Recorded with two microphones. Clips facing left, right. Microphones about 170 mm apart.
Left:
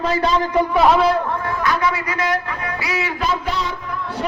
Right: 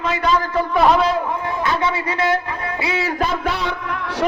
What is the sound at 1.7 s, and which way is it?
A man's voice, 25° right (ahead or behind).